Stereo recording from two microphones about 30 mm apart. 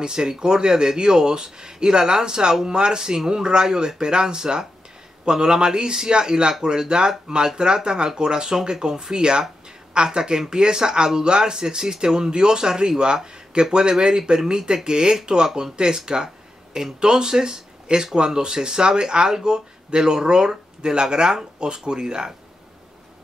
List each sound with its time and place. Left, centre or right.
0.0 s speech: right